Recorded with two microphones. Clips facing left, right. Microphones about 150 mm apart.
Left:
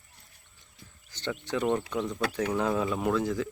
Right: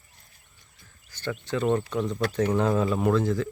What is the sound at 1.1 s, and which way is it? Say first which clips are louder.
Speech: right 2 dB; 20° left (ahead or behind).